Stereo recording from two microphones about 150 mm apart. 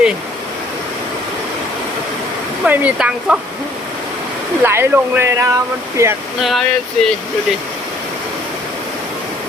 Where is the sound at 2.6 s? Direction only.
10° right (ahead or behind).